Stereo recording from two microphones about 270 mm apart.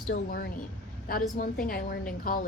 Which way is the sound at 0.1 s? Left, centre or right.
Left.